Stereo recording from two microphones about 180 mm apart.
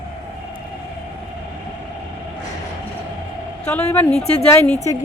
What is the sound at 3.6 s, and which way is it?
A woman's voice, 10° left (ahead or behind).